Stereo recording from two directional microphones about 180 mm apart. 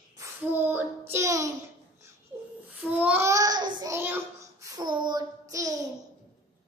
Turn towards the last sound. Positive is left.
turn(degrees=-20)  # may be behind; listen again after turning